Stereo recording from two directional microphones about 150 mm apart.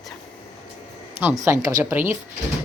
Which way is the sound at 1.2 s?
15° right (ahead or behind).